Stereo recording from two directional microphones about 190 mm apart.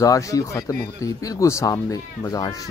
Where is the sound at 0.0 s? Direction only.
15° left (ahead or behind).